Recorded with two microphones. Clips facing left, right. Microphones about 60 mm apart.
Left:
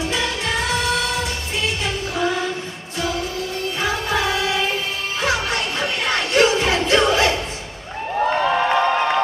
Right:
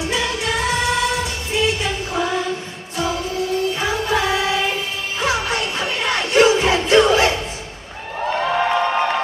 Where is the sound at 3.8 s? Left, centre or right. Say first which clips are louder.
Right 1 dB; right.